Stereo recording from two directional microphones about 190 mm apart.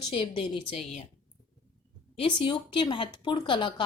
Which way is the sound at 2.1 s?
25° left (ahead or behind).